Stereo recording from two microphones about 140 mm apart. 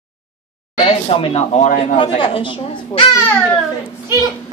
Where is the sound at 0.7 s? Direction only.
40° left (ahead or behind).